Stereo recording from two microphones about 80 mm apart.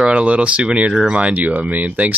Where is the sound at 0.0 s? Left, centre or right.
Centre.